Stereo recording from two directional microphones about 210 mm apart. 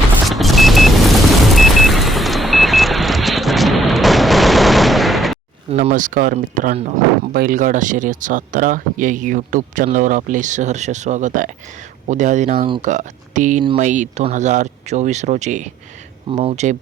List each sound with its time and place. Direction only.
0.3 s vehicle: centre (ahead or behind)
5.7 s speech: 35° right (ahead or behind)